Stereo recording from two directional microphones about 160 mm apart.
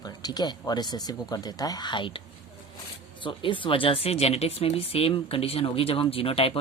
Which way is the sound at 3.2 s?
30° left (ahead or behind).